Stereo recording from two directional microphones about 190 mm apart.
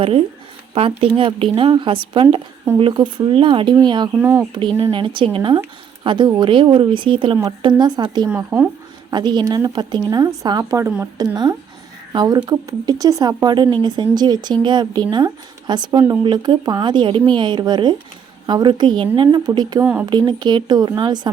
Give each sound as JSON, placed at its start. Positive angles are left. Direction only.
{"t": 0.7, "sound": "speech", "side_deg": -30}
{"t": 4.2, "sound": "speech", "side_deg": -10}
{"t": 4.5, "sound": "speech", "side_deg": -25}
{"t": 8.3, "sound": "speech", "side_deg": -10}
{"t": 9.1, "sound": "speech", "side_deg": -25}